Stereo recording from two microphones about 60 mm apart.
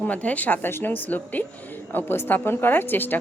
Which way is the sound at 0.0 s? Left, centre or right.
Left.